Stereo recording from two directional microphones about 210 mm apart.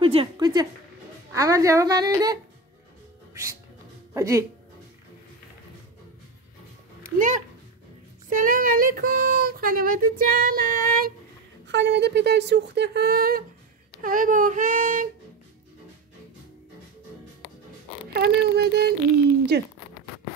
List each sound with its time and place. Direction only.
0.0 s a woman's voice: 25° right (ahead or behind)
4.1 s speech: 15° right (ahead or behind)
7.2 s speech: 35° right (ahead or behind)
11.6 s speech: 55° right (ahead or behind); by 15.0 s 40° right (ahead or behind)
18.1 s speech: 50° right (ahead or behind)